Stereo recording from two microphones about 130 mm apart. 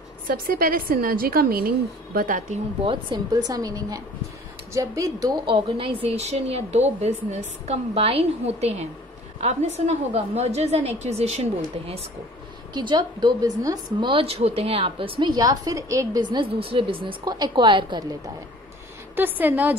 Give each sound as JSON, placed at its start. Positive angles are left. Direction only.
{"t": 0.5, "sound": "a woman's voice", "side_deg": -90}
{"t": 2.1, "sound": "a woman's voice", "side_deg": -90}
{"t": 2.8, "sound": "a woman's voice", "side_deg": -40}
{"t": 5.5, "sound": "a woman's voice", "side_deg": -45}
{"t": 12.7, "sound": "a woman's voice", "side_deg": -35}
{"t": 17.2, "sound": "a woman's voice", "side_deg": -30}
{"t": 19.1, "sound": "a woman's voice", "side_deg": -15}